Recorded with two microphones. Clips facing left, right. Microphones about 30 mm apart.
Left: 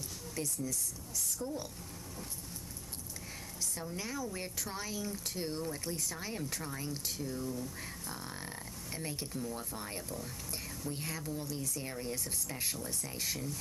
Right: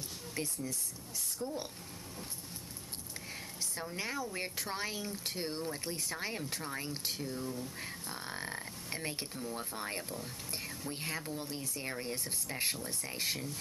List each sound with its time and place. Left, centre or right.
0.3 s speech: right
3.7 s speech: right